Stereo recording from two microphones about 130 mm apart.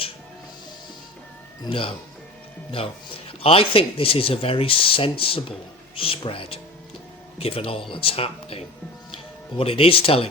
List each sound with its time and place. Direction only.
1.6 s speech: 45° left (ahead or behind)